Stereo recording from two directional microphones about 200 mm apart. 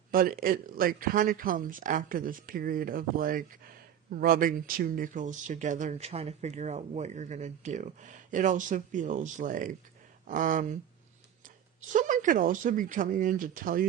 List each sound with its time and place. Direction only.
0.1 s speech: 45° right (ahead or behind)
11.9 s speech: 40° right (ahead or behind)